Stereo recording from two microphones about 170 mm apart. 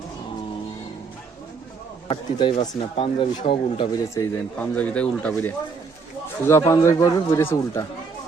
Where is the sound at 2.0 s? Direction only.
30° left (ahead or behind).